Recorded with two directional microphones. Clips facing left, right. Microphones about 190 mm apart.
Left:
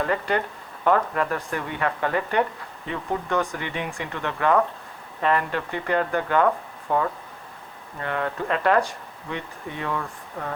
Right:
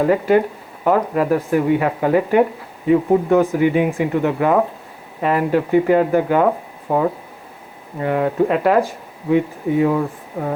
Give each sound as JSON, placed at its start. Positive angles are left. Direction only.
{"t": 0.0, "sound": "speech", "side_deg": -10}
{"t": 9.9, "sound": "speech", "side_deg": -20}